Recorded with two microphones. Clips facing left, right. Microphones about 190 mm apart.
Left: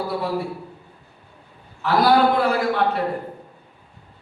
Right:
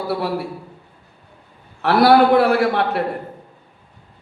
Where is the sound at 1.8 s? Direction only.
70° right (ahead or behind).